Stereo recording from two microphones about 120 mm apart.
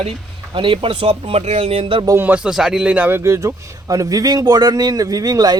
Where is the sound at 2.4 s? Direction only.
5° right (ahead or behind).